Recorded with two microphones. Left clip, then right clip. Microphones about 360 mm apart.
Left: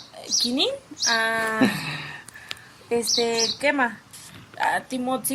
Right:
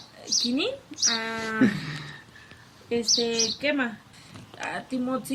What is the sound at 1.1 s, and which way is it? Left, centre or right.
Speech, centre.